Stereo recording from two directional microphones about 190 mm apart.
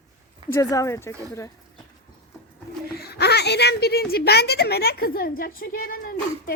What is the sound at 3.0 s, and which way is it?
Speech, 55° left (ahead or behind).